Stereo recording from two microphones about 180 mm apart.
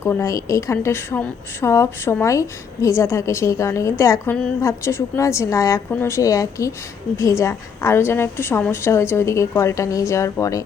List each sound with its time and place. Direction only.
0.0 s a woman's voice: 15° left (ahead or behind)